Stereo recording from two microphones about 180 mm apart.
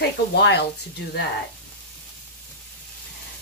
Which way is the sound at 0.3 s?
65° left (ahead or behind).